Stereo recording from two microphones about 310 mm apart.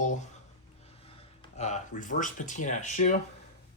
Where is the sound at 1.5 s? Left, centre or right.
Left.